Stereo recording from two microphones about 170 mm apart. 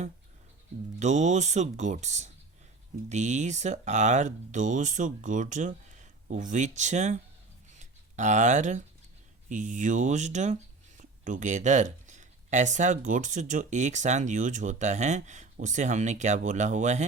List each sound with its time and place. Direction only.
0.9 s speech: 45° right (ahead or behind)
7.8 s a sound: 45° right (ahead or behind)
9.5 s speech: 50° right (ahead or behind)